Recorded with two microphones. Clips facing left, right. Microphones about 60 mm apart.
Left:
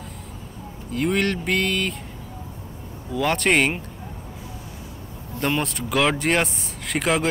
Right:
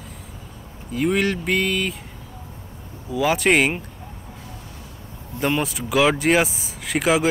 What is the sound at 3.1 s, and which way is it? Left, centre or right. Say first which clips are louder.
Speech: right 2 dB; centre.